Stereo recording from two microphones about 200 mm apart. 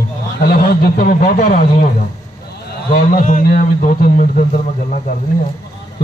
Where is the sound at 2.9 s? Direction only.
45° left (ahead or behind).